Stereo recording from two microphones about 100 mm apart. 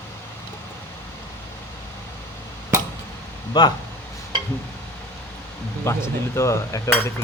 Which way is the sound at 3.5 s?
45° left (ahead or behind).